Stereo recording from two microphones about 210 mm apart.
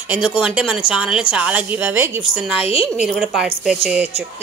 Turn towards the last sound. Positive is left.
turn(degrees=-5)  # may be behind; listen again after turning